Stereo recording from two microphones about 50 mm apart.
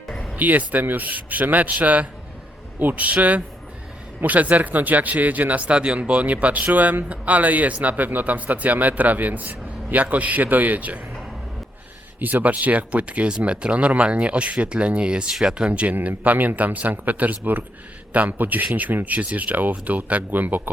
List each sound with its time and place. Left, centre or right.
0.3 s speech: right
12.2 s speech: right